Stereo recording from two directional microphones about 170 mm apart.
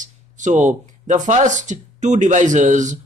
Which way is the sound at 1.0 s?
45° right (ahead or behind).